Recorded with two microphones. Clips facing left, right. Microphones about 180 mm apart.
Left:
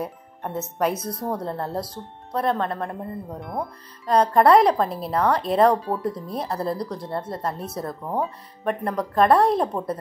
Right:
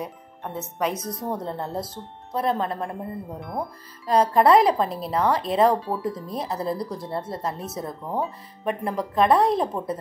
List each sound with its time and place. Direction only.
0.0 s music: 5° left (ahead or behind)
0.7 s speech: 5° left (ahead or behind)
7.0 s speech: 25° right (ahead or behind)
7.4 s speech: centre (ahead or behind)